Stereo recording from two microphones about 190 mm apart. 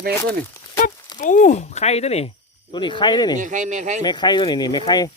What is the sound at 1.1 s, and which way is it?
Speech, 40° left (ahead or behind).